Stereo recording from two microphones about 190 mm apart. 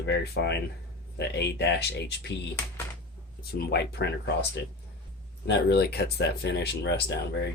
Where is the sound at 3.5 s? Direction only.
60° left (ahead or behind).